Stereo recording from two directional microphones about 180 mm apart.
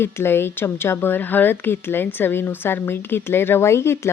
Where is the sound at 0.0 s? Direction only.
15° left (ahead or behind).